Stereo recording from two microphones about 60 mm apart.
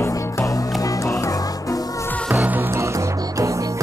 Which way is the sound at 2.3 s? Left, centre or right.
Right.